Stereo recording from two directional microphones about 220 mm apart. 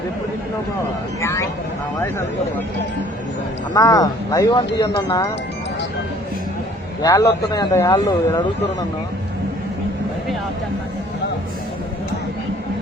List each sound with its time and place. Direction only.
1.2 s speech: 10° left (ahead or behind)
3.8 s speech: 15° left (ahead or behind)
7.0 s speech: 15° left (ahead or behind)